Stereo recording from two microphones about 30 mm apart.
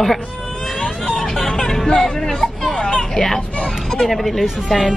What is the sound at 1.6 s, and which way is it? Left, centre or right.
Music, left.